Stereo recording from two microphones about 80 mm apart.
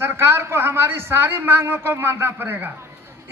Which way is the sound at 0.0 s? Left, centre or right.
Right.